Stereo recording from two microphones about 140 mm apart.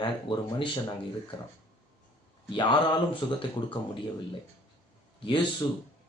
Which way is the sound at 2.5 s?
35° left (ahead or behind).